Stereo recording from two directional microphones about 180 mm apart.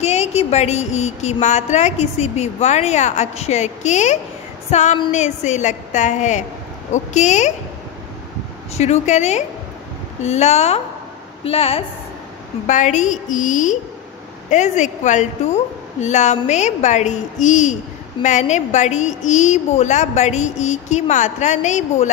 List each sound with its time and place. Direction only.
0.0 s a woman's voice: 35° left (ahead or behind)
4.6 s female singing: 40° left (ahead or behind)
5.1 s a woman's voice: 40° left (ahead or behind)
8.7 s a woman's voice: 40° left (ahead or behind)
12.6 s a woman's voice: 40° left (ahead or behind)